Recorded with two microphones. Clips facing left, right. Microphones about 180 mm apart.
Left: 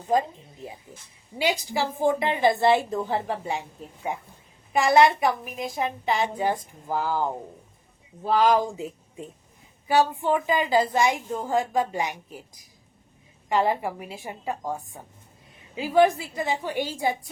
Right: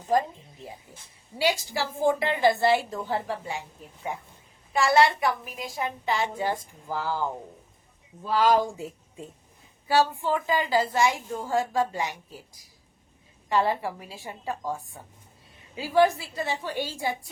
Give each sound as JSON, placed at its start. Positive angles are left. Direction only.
{"t": 1.4, "sound": "a woman's voice", "side_deg": 20}
{"t": 4.7, "sound": "a woman's voice", "side_deg": 20}
{"t": 8.3, "sound": "a woman's voice", "side_deg": 20}